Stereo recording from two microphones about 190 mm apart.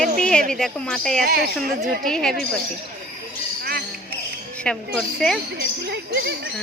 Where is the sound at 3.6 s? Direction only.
55° right (ahead or behind).